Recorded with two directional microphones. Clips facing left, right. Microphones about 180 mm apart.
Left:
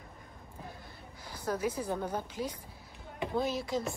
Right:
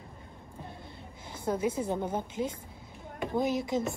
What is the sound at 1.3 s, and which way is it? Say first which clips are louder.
A woman's voice: right 3 dB; 25° right (ahead or behind).